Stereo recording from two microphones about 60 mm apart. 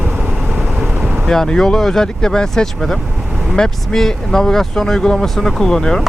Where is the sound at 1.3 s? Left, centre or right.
Centre.